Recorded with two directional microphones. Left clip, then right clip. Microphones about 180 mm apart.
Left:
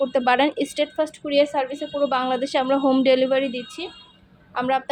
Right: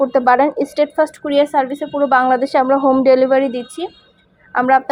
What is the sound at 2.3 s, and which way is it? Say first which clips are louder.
Speech: right 8 dB; 20° left (ahead or behind).